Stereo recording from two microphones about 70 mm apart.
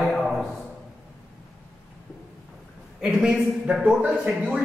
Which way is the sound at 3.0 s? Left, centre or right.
Centre.